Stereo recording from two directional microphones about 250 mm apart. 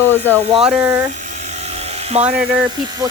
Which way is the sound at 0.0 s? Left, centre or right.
Centre.